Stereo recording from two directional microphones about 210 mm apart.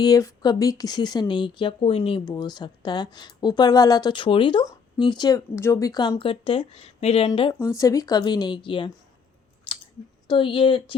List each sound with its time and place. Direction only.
0.0 s speech: 15° left (ahead or behind)
9.7 s scissors: 25° left (ahead or behind)
10.2 s speech: 25° left (ahead or behind)